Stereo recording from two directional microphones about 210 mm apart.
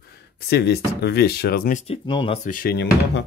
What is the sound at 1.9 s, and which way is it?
Speech, 25° left (ahead or behind).